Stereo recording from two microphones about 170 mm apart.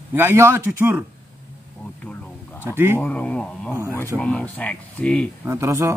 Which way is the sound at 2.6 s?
15° right (ahead or behind).